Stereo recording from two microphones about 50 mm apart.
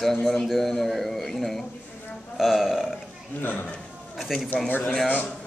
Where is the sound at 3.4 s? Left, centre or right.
Left.